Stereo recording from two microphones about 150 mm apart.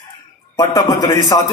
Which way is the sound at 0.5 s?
25° left (ahead or behind).